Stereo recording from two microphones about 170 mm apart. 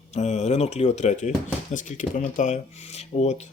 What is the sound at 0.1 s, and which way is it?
Speech, 40° left (ahead or behind).